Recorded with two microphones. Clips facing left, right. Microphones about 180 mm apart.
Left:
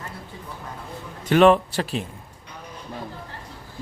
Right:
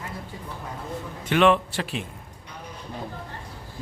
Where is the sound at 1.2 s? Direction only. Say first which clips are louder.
Left 4 dB; 40° left (ahead or behind).